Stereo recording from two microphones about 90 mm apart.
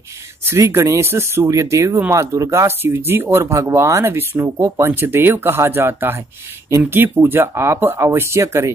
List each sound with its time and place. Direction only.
0.5 s speech: 30° right (ahead or behind)